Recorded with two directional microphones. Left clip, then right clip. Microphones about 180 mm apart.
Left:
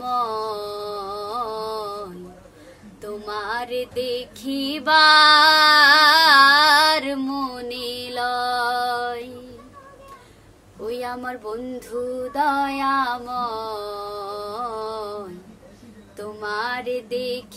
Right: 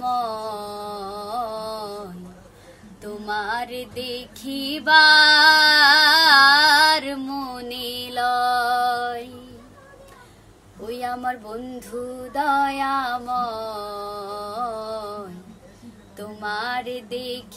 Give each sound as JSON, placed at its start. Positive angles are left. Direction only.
{"t": 0.0, "sound": "music", "side_deg": 15}
{"t": 3.0, "sound": "music", "side_deg": 20}
{"t": 10.9, "sound": "a sound", "side_deg": 15}
{"t": 12.4, "sound": "music", "side_deg": 15}